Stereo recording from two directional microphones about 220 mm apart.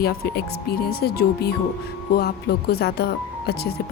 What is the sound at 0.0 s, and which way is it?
Speech, 45° left (ahead or behind).